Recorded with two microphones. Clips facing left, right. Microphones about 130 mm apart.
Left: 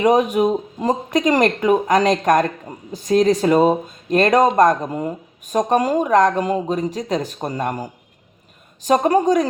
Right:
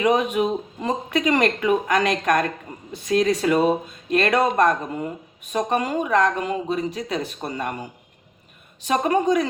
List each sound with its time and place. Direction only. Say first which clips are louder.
0.0 s speech: left 4 dB; 40° left (ahead or behind)